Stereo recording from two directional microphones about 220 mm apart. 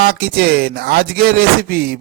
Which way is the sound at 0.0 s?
45° right (ahead or behind).